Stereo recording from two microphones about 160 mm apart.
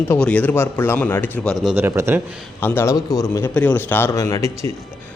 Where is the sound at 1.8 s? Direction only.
15° right (ahead or behind).